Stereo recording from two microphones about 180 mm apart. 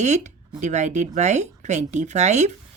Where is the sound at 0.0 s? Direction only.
40° right (ahead or behind).